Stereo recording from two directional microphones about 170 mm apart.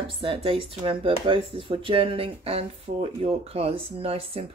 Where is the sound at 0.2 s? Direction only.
30° right (ahead or behind).